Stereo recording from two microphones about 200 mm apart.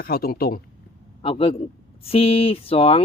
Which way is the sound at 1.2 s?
25° left (ahead or behind).